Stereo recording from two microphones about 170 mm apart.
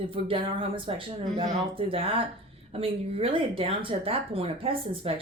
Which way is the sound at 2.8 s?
35° right (ahead or behind).